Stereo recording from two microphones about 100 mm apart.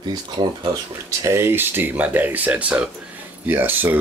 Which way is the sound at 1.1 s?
30° right (ahead or behind).